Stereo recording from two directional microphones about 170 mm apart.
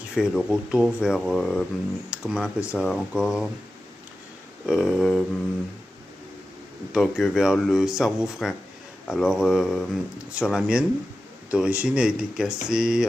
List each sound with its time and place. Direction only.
0.1 s speech: 5° right (ahead or behind)
4.6 s speech: 5° right (ahead or behind)
6.9 s speech: centre (ahead or behind)